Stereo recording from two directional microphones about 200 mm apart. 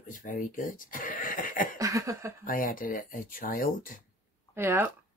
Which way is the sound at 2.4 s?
45° left (ahead or behind).